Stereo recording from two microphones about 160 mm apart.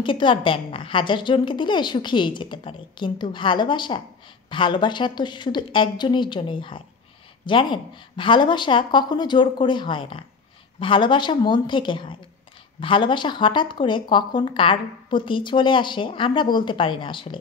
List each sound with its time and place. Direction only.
0.0 s a woman's voice: 30° left (ahead or behind)